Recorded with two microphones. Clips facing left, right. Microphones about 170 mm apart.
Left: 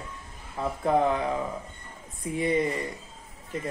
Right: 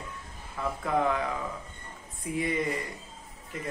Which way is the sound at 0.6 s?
30° left (ahead or behind).